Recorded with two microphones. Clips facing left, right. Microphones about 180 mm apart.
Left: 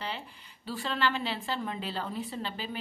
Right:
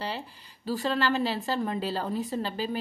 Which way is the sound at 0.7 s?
40° right (ahead or behind).